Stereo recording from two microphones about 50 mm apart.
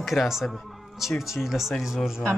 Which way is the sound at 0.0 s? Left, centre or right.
Centre.